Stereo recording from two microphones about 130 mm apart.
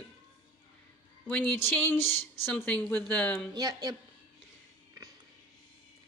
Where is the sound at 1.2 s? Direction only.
10° left (ahead or behind).